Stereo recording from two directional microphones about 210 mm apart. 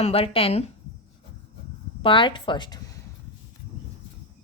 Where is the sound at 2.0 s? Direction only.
25° left (ahead or behind).